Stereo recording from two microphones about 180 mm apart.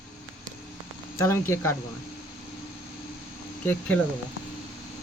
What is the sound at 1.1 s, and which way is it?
Speech, 15° left (ahead or behind).